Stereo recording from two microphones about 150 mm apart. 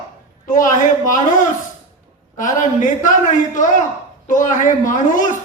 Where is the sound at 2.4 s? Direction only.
60° left (ahead or behind).